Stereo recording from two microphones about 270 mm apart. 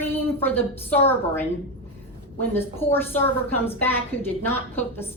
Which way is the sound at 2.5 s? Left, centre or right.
Centre.